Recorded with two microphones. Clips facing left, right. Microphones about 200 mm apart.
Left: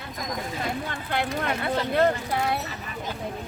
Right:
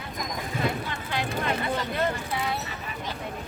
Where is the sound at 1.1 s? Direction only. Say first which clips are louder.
Left 1 dB; 55° left (ahead or behind).